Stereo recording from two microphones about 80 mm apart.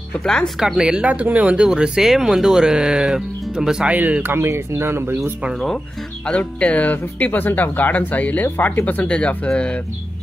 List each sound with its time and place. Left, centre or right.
0.2 s speech: centre
0.6 s speech: centre
3.9 s speech: centre
6.2 s speech: centre